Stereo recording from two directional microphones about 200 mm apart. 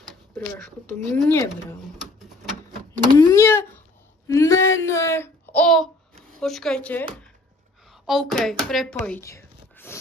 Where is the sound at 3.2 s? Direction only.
15° left (ahead or behind).